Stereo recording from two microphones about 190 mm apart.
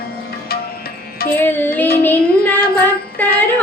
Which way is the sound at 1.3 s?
10° left (ahead or behind).